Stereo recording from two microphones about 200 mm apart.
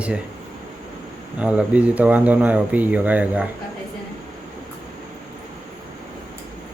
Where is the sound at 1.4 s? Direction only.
5° right (ahead or behind).